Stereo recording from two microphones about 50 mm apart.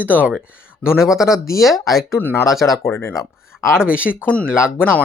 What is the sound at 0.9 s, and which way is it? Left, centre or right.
Speech, centre.